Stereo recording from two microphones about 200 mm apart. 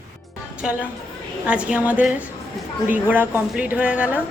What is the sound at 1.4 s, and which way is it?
A woman's voice, 5° right (ahead or behind).